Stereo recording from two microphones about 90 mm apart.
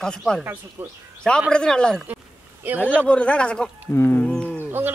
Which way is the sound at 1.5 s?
10° left (ahead or behind).